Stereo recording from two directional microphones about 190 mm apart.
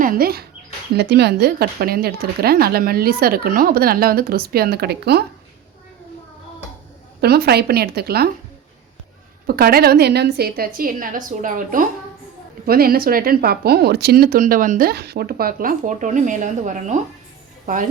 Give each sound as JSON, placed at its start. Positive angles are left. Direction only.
{"t": 0.0, "sound": "bird", "side_deg": -50}
{"t": 0.9, "sound": "speech", "side_deg": -60}
{"t": 7.2, "sound": "a woman's voice", "side_deg": -55}
{"t": 9.5, "sound": "speech", "side_deg": -55}